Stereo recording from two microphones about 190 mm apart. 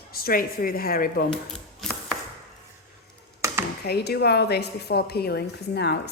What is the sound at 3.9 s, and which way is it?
A woman's voice, 60° left (ahead or behind).